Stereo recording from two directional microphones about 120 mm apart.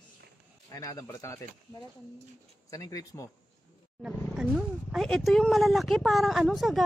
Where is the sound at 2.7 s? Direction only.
30° left (ahead or behind).